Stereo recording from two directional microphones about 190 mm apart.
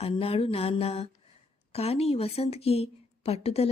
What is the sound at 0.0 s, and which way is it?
Speech, 30° left (ahead or behind).